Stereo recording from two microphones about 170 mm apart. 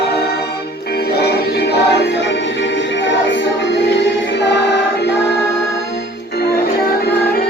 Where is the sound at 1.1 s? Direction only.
70° left (ahead or behind).